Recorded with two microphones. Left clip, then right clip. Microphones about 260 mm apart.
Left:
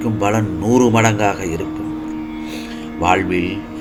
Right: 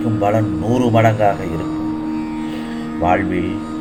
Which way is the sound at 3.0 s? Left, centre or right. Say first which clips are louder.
Left 1 dB; left.